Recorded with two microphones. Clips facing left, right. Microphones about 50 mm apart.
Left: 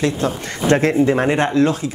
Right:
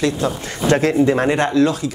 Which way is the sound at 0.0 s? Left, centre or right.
Left.